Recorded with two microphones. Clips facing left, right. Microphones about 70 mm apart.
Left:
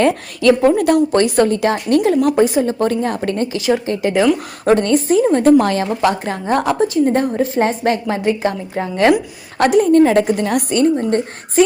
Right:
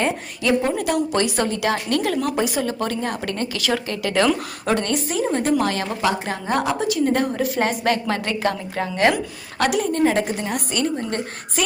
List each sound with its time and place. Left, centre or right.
0.6 s a woman's voice: left
2.0 s a woman's voice: left
4.1 s a woman's voice: centre
4.6 s a woman's voice: left
9.6 s a woman's voice: left